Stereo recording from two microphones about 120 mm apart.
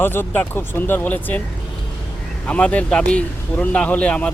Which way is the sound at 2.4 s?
10° left (ahead or behind).